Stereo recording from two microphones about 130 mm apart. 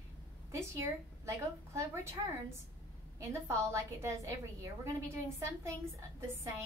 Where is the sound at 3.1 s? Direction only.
20° right (ahead or behind).